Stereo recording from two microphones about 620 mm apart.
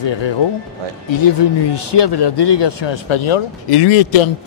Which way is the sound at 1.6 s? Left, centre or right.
Left.